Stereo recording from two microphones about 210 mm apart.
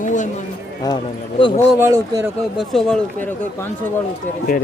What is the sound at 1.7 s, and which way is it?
Speech, 15° right (ahead or behind).